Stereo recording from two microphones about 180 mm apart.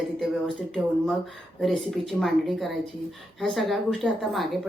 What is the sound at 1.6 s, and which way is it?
A woman's voice, centre (ahead or behind).